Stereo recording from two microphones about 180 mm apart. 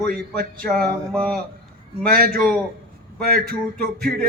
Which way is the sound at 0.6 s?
5° left (ahead or behind).